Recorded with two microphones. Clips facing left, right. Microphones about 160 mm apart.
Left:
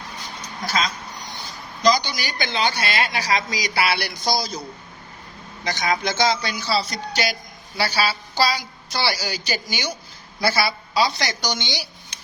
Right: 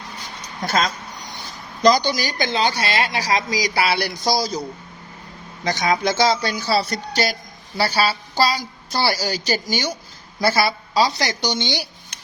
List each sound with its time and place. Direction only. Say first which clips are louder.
0.6 s a woman's voice: right 3 dB; 50° right (ahead or behind)
5.6 s a woman's voice: right 4 dB; 35° right (ahead or behind); by 7.0 s 55° right (ahead or behind)
7.8 s a woman's voice: right 3 dB; 45° right (ahead or behind); by 11.6 s 25° right (ahead or behind)